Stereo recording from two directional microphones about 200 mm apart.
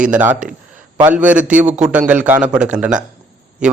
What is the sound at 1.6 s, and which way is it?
Speech, 35° right (ahead or behind).